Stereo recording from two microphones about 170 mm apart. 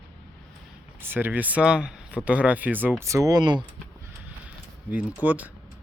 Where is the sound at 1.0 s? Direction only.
10° right (ahead or behind).